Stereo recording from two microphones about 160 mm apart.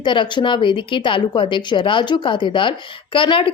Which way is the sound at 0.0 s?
30° left (ahead or behind).